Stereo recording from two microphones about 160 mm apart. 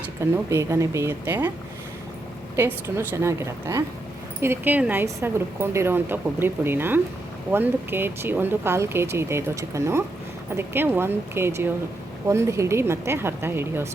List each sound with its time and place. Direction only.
0.2 s speech: 15° right (ahead or behind)
2.6 s speech: 15° right (ahead or behind)